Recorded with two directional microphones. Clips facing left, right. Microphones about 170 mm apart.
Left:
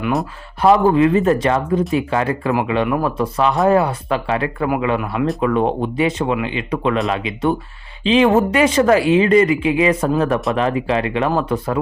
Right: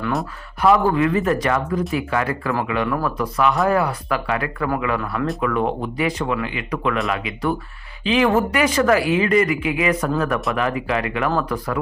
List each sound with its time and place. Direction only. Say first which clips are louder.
0.6 s speech: left 4 dB; 25° left (ahead or behind)